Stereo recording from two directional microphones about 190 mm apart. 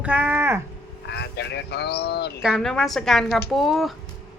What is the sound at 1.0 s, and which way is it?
Speech, 60° left (ahead or behind).